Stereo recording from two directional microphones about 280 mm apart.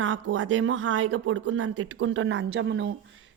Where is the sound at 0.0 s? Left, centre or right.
Right.